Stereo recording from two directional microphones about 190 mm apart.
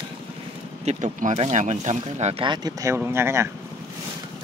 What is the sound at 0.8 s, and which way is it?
Speech, 40° right (ahead or behind).